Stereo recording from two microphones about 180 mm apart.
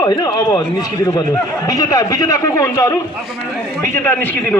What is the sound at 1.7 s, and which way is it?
A man's voice, 20° left (ahead or behind).